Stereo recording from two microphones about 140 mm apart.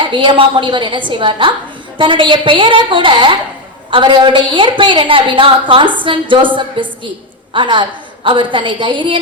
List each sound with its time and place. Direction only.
0.0 s a woman's voice: 35° right (ahead or behind)